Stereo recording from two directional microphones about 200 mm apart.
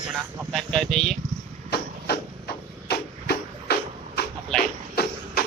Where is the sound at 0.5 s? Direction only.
5° left (ahead or behind).